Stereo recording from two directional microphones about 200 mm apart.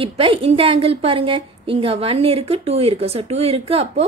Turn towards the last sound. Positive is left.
turn(degrees=-30)  # may be behind; listen again after turning